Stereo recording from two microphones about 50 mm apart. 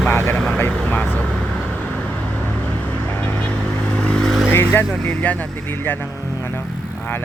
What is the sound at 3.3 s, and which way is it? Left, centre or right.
Vehicle, left.